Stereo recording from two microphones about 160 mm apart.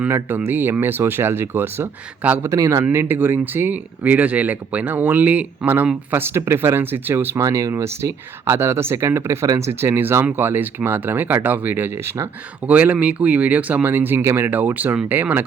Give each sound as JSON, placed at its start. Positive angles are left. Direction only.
{"t": 0.0, "sound": "speech", "side_deg": -10}